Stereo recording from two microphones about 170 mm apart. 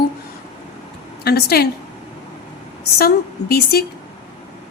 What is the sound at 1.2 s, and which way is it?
Speech, 65° left (ahead or behind).